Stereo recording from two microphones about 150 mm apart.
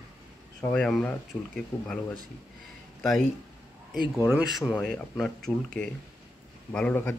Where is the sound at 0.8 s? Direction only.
5° left (ahead or behind).